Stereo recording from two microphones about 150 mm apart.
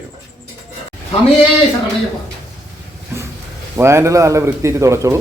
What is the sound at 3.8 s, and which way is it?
Speech, 20° right (ahead or behind).